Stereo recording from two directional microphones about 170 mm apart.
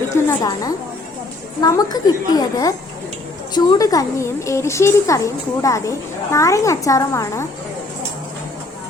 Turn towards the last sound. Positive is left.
turn(degrees=20)  # may be behind; listen again after turning